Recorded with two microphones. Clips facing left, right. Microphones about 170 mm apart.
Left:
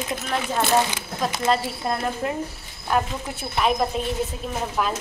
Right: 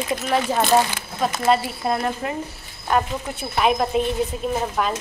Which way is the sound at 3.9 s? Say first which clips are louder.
Right 6 dB; 5° right (ahead or behind).